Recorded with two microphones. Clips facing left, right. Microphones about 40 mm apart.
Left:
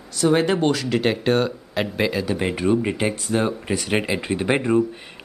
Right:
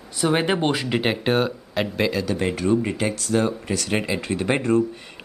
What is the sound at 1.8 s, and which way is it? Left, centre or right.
Speech, centre.